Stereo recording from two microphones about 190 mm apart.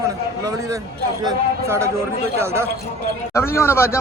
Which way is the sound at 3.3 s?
15° left (ahead or behind).